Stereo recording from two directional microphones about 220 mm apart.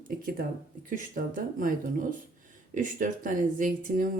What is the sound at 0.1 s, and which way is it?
Speech, 40° right (ahead or behind).